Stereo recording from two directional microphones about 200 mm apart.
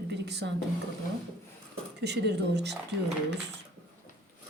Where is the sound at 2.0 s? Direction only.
55° right (ahead or behind).